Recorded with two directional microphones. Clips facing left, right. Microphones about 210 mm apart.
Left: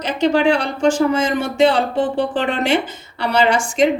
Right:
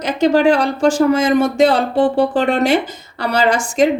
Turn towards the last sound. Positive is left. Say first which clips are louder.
# right 1 dB
turn(degrees=-40)  # may be behind; listen again after turning